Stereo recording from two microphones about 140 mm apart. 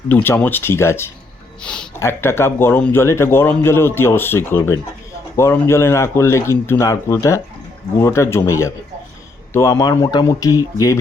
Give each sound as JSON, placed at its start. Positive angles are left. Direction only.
{"t": 0.1, "sound": "a man's voice", "side_deg": 15}
{"t": 1.6, "sound": "a man's voice", "side_deg": 10}
{"t": 2.0, "sound": "a man's voice", "side_deg": 20}